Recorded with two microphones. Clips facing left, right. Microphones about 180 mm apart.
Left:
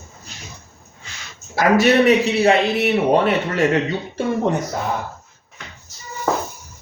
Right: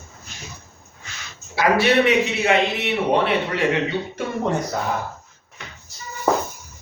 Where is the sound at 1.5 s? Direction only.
45° left (ahead or behind).